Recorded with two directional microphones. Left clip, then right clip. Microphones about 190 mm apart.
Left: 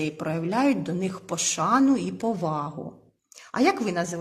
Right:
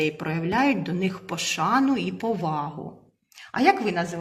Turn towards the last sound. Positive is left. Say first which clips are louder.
# right 3 dB
turn(degrees=60)  # may be behind; listen again after turning